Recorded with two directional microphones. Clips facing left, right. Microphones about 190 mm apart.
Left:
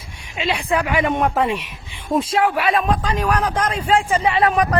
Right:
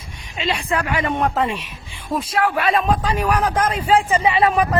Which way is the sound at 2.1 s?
25° left (ahead or behind).